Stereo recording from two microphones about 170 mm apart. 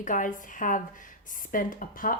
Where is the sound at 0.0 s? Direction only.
50° left (ahead or behind).